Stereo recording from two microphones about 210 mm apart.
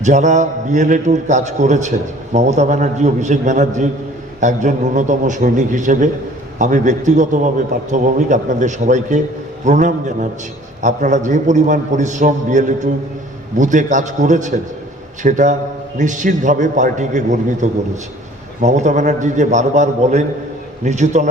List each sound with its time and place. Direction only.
0.0 s a man's voice: 35° right (ahead or behind)